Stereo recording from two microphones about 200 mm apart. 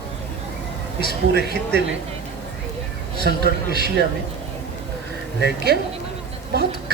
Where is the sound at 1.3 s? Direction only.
55° right (ahead or behind).